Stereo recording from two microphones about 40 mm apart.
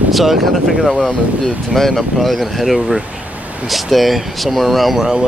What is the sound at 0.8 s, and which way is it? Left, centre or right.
Speech, centre.